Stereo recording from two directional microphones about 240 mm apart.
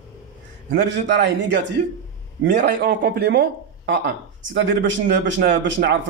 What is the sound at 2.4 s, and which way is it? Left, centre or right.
Speech, right.